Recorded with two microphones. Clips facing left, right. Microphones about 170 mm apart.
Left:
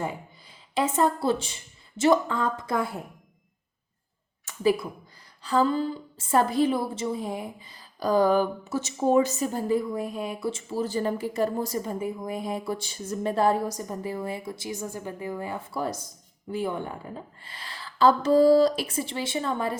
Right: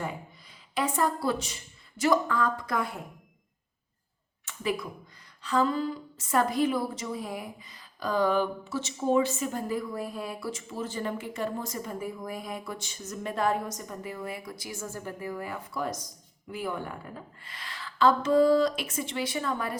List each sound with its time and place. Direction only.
0.7 s speech: 25° left (ahead or behind)
4.4 s a sound: 35° left (ahead or behind)
5.4 s a woman's voice: 35° left (ahead or behind)
9.9 s a woman's voice: 20° left (ahead or behind)